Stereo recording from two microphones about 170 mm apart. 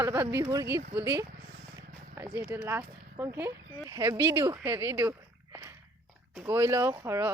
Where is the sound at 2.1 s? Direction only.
15° right (ahead or behind).